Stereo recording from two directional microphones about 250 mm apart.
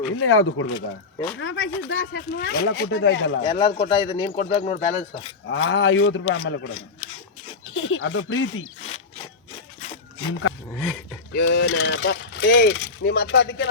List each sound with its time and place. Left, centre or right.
0.2 s speech: left
3.4 s speech: left
5.5 s speech: left
7.7 s speech: left
8.8 s a sound: left
10.8 s speech: centre
11.3 s speech: left